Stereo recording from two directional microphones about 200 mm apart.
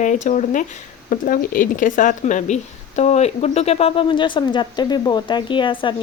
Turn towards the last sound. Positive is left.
turn(degrees=25)  # may be behind; listen again after turning